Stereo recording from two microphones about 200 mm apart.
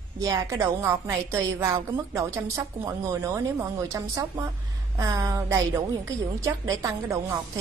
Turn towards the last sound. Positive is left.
turn(degrees=-15)  # may be behind; listen again after turning